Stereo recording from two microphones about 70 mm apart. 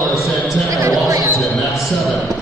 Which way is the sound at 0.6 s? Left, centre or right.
Right.